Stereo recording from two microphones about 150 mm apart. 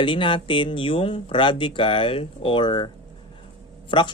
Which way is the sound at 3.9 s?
30° left (ahead or behind).